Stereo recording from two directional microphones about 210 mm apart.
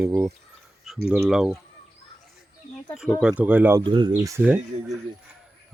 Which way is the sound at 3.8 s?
25° right (ahead or behind).